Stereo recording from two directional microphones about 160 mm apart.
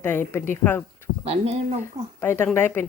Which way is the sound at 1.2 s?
40° right (ahead or behind).